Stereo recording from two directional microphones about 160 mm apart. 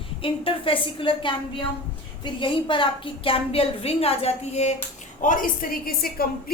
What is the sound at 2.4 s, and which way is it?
A woman's voice, 30° left (ahead or behind).